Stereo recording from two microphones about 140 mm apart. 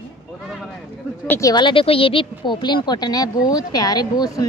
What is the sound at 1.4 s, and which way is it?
Speech, 30° left (ahead or behind).